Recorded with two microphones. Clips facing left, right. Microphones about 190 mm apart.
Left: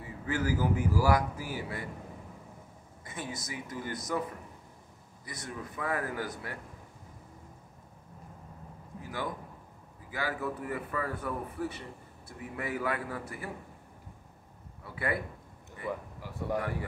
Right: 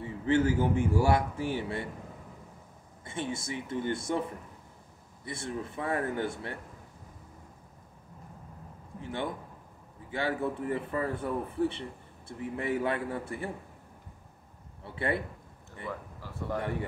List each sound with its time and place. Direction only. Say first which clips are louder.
0.0 s speech: right 7 dB; 25° right (ahead or behind)
3.1 s speech: right 5 dB; 25° right (ahead or behind)
5.2 s speech: right 5 dB; 25° right (ahead or behind)
9.0 s speech: right 2 dB; 25° right (ahead or behind)
14.8 s a man's voice: right 2 dB; 25° right (ahead or behind)
15.9 s speech: left 3 dB; 15° left (ahead or behind)